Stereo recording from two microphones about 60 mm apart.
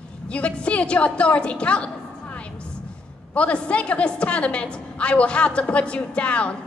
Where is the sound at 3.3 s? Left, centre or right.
Left.